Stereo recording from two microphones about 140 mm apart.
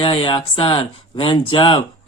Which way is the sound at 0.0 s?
40° left (ahead or behind).